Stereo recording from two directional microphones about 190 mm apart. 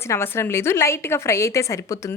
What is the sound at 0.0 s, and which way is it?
A woman's voice, 15° left (ahead or behind).